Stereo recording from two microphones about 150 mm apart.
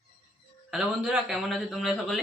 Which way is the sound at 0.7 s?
5° right (ahead or behind).